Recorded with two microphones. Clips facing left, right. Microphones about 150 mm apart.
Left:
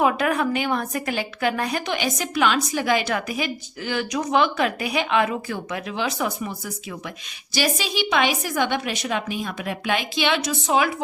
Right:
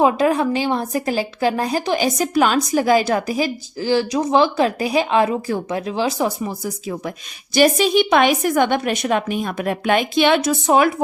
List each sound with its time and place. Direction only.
0.0 s speech: 25° right (ahead or behind)
7.5 s a woman's voice: 50° right (ahead or behind)